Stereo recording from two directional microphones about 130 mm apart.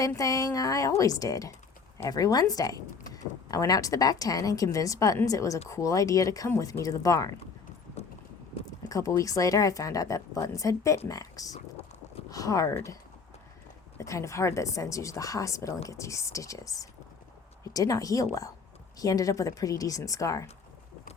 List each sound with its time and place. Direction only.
0.2 s a woman's voice: 25° left (ahead or behind)
8.0 s clip-clop: 55° left (ahead or behind)
8.9 s a woman's voice: 25° left (ahead or behind)
14.0 s a woman's voice: 25° left (ahead or behind)